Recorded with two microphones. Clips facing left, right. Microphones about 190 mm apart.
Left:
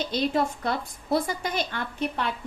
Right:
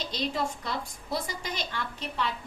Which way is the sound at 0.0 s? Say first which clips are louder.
Left 6 dB; 55° left (ahead or behind).